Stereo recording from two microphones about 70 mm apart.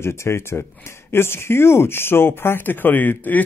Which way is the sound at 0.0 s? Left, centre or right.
Left.